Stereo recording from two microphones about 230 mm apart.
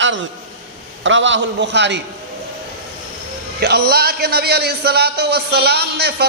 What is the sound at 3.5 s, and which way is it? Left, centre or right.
A man's voice, right.